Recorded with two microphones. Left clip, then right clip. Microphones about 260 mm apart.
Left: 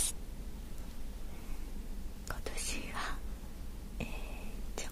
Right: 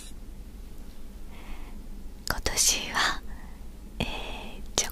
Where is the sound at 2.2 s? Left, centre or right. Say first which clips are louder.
Right 16 dB; right.